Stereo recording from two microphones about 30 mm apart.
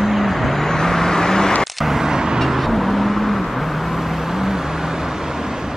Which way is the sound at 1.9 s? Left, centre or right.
Centre.